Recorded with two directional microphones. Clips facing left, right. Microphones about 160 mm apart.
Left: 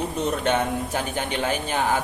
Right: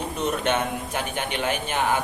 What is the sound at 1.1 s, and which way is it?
Speech, 35° left (ahead or behind).